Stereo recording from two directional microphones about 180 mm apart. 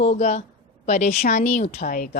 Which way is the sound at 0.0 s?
40° left (ahead or behind).